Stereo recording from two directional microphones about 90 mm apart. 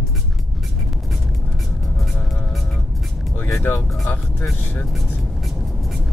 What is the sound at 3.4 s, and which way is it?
Music, 25° left (ahead or behind).